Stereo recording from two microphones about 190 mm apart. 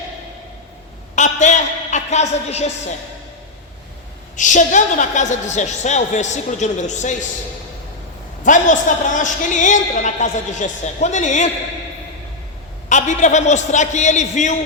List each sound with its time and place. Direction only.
1.1 s a sound: 40° left (ahead or behind)
4.4 s a woman's voice: 40° left (ahead or behind)
8.4 s a woman's voice: 40° left (ahead or behind)
12.9 s a woman's voice: 40° left (ahead or behind)